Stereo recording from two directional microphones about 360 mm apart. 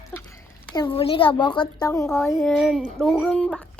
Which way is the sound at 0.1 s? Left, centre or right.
Centre.